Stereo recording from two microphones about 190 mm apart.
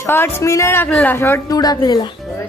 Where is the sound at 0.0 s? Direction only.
15° left (ahead or behind).